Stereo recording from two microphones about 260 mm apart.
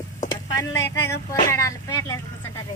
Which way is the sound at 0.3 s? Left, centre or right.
Centre.